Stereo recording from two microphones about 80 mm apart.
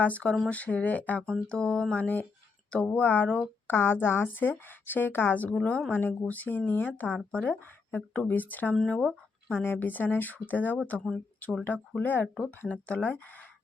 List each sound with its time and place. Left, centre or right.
0.0 s speech: centre